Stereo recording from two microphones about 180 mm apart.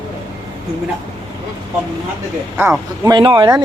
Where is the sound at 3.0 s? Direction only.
25° right (ahead or behind).